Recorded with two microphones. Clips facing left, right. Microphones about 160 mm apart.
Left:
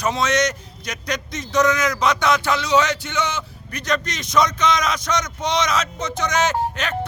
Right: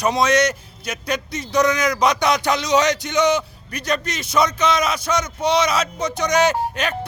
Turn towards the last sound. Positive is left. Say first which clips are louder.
# right 3 dB
turn(degrees=-10)  # may be behind; listen again after turning